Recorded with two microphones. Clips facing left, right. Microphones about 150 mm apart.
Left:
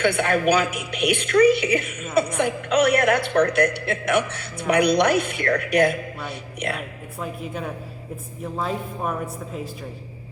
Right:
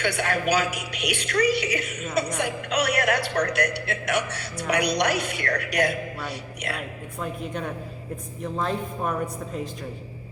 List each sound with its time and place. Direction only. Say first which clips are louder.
0.0 s speech: left 5 dB; 50° left (ahead or behind)
7.2 s speech: left 1 dB; 5° left (ahead or behind)